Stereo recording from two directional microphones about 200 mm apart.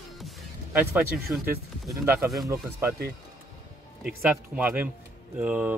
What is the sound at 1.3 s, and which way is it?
Speech, 10° right (ahead or behind).